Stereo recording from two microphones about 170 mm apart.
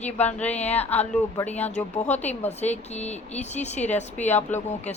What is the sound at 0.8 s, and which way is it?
Speech, 10° left (ahead or behind).